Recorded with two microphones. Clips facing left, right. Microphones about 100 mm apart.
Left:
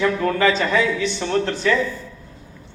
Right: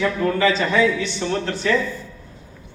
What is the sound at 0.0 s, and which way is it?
A man's voice, 40° left (ahead or behind).